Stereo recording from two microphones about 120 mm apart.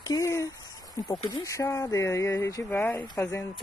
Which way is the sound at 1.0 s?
30° left (ahead or behind).